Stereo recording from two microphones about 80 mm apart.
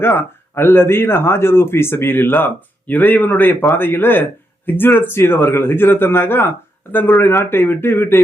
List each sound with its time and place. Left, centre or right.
0.0 s speech: left